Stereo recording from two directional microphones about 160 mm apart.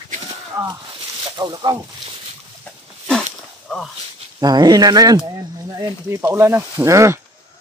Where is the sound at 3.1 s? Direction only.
5° left (ahead or behind).